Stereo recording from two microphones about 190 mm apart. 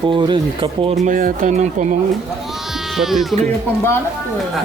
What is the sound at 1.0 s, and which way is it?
Speech, 45° right (ahead or behind).